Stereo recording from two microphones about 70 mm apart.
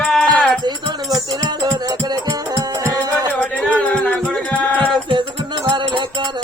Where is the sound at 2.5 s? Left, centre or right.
Right.